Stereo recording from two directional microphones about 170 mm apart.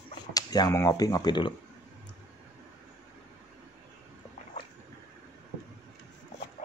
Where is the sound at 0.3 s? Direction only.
20° left (ahead or behind).